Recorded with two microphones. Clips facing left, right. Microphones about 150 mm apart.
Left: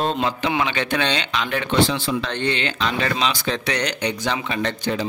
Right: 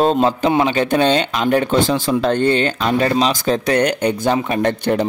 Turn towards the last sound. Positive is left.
turn(degrees=-55)  # may be behind; listen again after turning